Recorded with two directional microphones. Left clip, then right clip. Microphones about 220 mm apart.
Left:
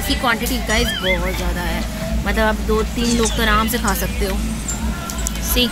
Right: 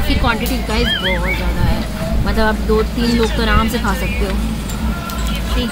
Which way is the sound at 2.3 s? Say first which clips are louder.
Right 1 dB; 30° left (ahead or behind).